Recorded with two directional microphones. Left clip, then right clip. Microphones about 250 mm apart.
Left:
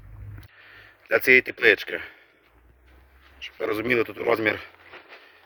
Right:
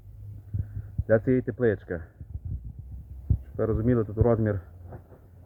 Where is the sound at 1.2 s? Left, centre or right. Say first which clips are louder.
Left 8 dB; left.